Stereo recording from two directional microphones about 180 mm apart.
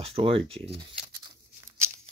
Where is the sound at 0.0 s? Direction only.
30° right (ahead or behind).